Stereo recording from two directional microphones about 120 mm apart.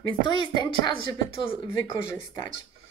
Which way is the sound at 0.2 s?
40° left (ahead or behind).